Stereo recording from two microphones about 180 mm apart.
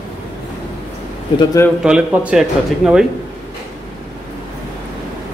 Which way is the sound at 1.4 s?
20° left (ahead or behind).